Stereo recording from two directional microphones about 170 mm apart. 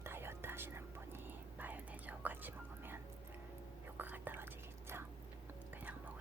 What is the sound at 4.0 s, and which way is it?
Whispering, 10° right (ahead or behind).